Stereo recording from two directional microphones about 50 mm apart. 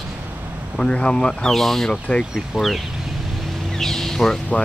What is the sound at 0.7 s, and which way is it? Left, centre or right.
Speech, centre.